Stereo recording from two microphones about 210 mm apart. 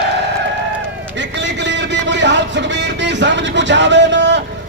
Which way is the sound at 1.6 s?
55° right (ahead or behind).